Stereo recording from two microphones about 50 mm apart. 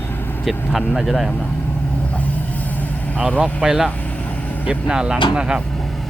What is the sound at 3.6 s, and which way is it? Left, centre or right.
Speech, centre.